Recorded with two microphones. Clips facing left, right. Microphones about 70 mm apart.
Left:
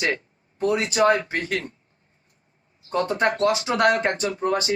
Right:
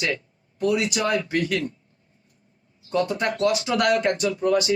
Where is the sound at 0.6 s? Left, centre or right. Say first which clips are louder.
Left 3 dB; left.